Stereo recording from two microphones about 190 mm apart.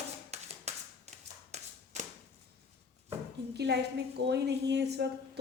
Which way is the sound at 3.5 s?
60° right (ahead or behind).